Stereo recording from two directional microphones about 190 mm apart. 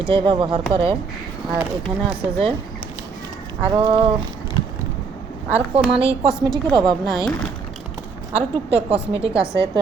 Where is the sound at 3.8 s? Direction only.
25° right (ahead or behind).